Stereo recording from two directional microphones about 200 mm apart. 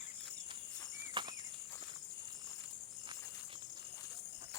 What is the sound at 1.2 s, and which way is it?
Walk, 25° right (ahead or behind).